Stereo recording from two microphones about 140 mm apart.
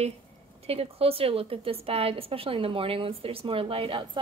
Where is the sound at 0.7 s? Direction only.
45° right (ahead or behind).